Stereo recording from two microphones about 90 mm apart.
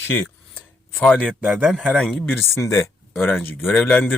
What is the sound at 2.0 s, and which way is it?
Speech, 5° left (ahead or behind).